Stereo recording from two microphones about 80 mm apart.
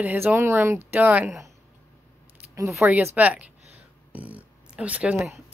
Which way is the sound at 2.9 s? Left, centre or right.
Centre.